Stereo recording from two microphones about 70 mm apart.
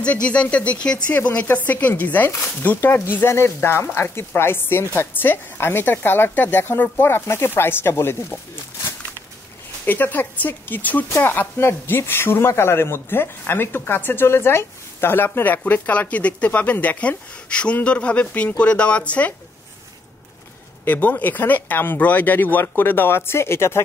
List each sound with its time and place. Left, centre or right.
0.0 s speech: centre; by 8.4 s left
9.8 s speech: left
20.8 s speech: left